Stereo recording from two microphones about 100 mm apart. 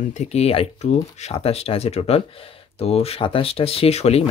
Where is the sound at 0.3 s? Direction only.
85° left.